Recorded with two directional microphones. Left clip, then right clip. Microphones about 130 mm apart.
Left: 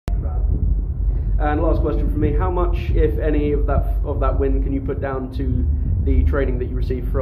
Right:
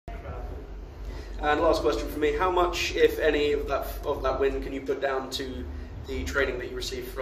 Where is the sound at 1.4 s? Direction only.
25° left (ahead or behind).